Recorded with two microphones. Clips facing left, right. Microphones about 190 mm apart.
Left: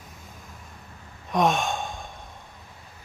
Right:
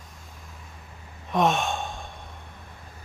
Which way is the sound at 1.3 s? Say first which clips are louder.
Even; centre (ahead or behind).